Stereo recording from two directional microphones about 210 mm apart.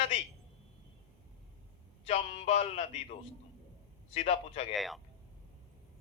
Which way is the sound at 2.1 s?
30° left (ahead or behind).